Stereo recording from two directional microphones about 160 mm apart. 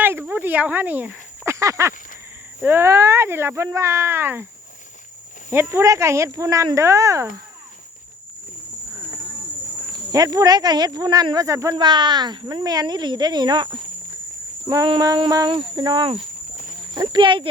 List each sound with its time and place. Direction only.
0.0 s snake: 15° right (ahead or behind)
2.6 s speech: 15° right (ahead or behind)
5.5 s speech: 15° right (ahead or behind)
9.9 s speech: 25° right (ahead or behind)
14.7 s speech: 25° right (ahead or behind)